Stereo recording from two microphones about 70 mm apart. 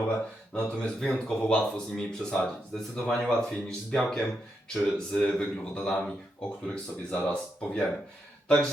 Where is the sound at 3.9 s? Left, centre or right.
Centre.